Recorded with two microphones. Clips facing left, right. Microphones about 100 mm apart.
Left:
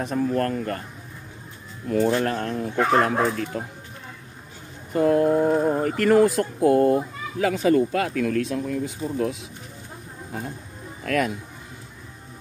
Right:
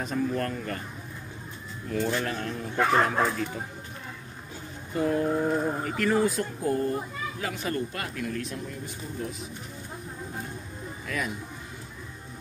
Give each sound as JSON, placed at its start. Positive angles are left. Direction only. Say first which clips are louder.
{"t": 0.0, "sound": "speech", "louder": "left 5 dB", "side_deg": 55}
{"t": 1.9, "sound": "speech", "louder": "left 7 dB", "side_deg": 45}
{"t": 4.9, "sound": "speech", "louder": "left 7 dB", "side_deg": 60}
{"t": 5.5, "sound": "speech", "louder": "left 7 dB", "side_deg": 50}
{"t": 11.1, "sound": "speech", "louder": "left 9 dB", "side_deg": 65}